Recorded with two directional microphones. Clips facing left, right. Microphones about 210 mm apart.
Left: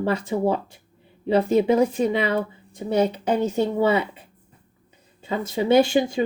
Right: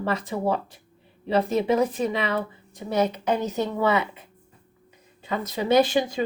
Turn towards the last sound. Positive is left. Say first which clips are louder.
# left 2 dB
turn(degrees=25)  # may be behind; listen again after turning